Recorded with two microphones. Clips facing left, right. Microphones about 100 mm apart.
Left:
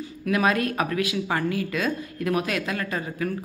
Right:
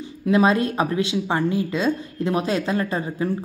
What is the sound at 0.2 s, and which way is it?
Speech, 25° right (ahead or behind).